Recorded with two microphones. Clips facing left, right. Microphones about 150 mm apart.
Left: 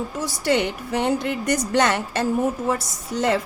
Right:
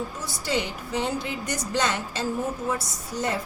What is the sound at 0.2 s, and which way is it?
A woman's voice, 65° left (ahead or behind).